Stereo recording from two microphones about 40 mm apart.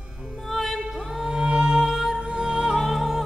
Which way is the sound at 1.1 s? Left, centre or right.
Centre.